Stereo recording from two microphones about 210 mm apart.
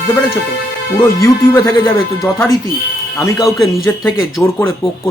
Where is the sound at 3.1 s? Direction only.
15° left (ahead or behind).